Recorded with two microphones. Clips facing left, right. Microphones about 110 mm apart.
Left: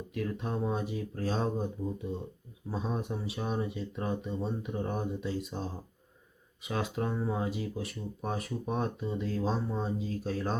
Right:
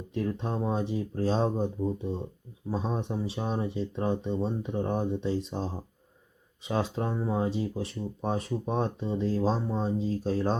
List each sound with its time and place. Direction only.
0.1 s speech: 30° right (ahead or behind)